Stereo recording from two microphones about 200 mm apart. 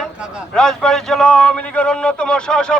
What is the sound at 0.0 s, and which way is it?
Speech, centre (ahead or behind).